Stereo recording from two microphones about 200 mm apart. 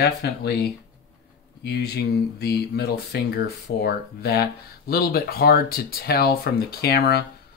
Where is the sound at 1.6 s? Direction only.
55° left (ahead or behind).